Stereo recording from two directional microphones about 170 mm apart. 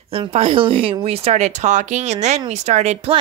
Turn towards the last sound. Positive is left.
turn(degrees=-40)  # may be behind; listen again after turning